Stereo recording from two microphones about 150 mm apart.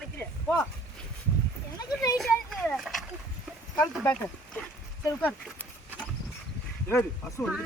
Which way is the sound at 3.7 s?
10° left (ahead or behind).